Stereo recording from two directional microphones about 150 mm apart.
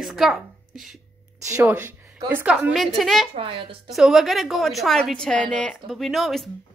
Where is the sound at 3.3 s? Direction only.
40° right (ahead or behind).